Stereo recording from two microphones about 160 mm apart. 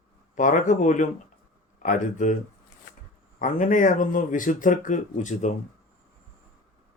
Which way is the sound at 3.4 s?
55° left (ahead or behind).